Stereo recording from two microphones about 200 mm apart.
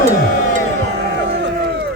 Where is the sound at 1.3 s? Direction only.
60° right (ahead or behind).